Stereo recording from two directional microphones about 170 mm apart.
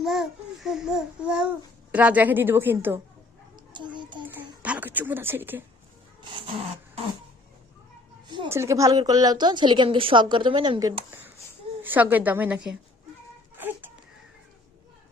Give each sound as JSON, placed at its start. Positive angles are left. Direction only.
{"t": 0.0, "sound": "a child's voice", "side_deg": 0}
{"t": 3.5, "sound": "dog", "side_deg": -25}
{"t": 4.2, "sound": "a child's voice", "side_deg": -10}
{"t": 8.4, "sound": "speech", "side_deg": -15}
{"t": 11.8, "sound": "a child's voice", "side_deg": -10}
{"t": 13.6, "sound": "a sound", "side_deg": -10}